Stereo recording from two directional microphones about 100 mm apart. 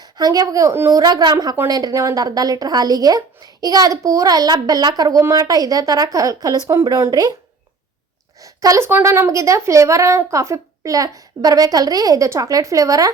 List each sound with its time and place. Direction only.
0.0 s a woman's voice: 40° right (ahead or behind); by 0.9 s 25° right (ahead or behind)
0.9 s a woman's voice: 40° right (ahead or behind)
7.1 s a woman's voice: 40° right (ahead or behind)
8.4 s a woman's voice: 35° right (ahead or behind)
8.9 s a woman's voice: 25° right (ahead or behind)